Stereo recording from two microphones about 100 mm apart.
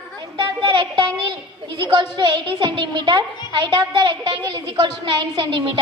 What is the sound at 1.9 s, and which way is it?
A woman's voice, 45° right (ahead or behind).